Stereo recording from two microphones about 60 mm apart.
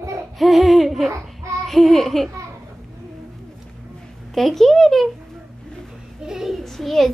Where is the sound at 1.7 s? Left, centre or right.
Centre.